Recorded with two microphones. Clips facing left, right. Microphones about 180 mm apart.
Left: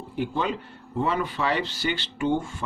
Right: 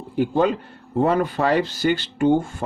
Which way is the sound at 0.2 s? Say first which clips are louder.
Right 8 dB; 45° right (ahead or behind).